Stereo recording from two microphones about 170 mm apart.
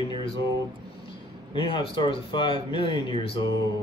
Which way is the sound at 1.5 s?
30° left (ahead or behind).